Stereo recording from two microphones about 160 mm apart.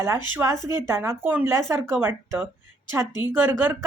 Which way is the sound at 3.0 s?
25° left (ahead or behind).